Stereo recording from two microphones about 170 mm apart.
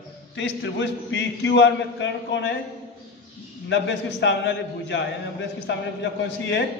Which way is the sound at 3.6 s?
90° left.